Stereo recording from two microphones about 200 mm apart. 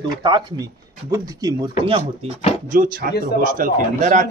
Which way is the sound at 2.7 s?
40° right (ahead or behind).